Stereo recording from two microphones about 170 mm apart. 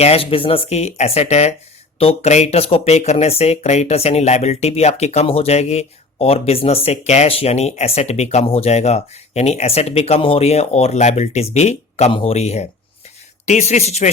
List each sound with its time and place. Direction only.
0.0 s speech: 35° left (ahead or behind)